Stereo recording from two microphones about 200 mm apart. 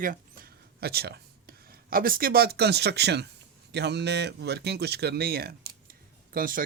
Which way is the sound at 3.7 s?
55° right (ahead or behind).